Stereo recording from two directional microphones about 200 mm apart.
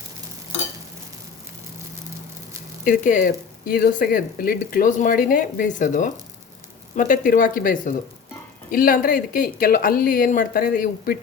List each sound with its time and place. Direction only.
2.8 s speech: 40° left (ahead or behind)